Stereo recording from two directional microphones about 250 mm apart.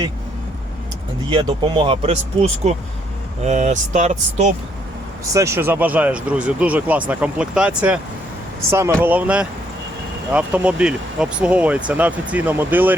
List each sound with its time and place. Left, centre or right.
1.3 s speech: centre
5.3 s speech: centre